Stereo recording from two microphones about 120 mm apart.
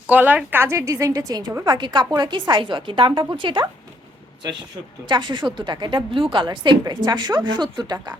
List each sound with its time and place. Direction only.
0.1 s a woman's voice: 15° right (ahead or behind); by 3.7 s 40° right (ahead or behind)
5.0 s a woman's voice: 40° right (ahead or behind)